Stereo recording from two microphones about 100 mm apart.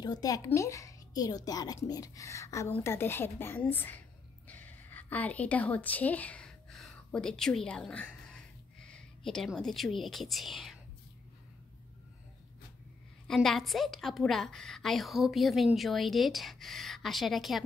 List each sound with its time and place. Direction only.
0.0 s a woman's voice: 40° left (ahead or behind); by 4.0 s 20° left (ahead or behind)
4.5 s a sound: 15° left (ahead or behind)
9.6 s a woman's voice: centre (ahead or behind)
13.3 s a woman's voice: 5° left (ahead or behind)